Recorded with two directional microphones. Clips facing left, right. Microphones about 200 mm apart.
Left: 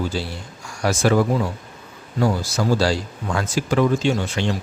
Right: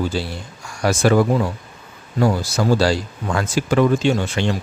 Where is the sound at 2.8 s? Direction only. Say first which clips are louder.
Right 2 dB; 60° right (ahead or behind).